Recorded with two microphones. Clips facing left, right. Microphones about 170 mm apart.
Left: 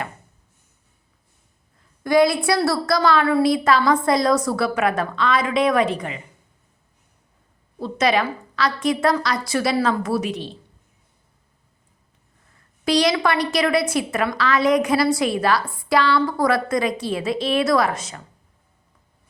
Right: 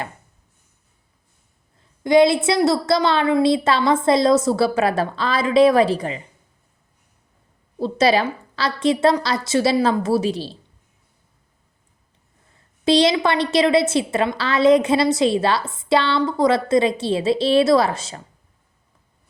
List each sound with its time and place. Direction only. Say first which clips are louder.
2.0 s a woman's voice: right 2 dB; 25° right (ahead or behind)
7.8 s a woman's voice: right 3 dB; 30° right (ahead or behind)
12.8 s a woman's voice: right 3 dB; 25° right (ahead or behind)